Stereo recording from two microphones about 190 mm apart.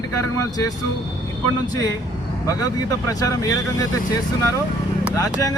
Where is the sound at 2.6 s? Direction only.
20° left (ahead or behind).